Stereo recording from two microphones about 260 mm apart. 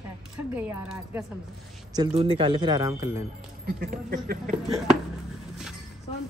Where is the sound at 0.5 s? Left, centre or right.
Centre.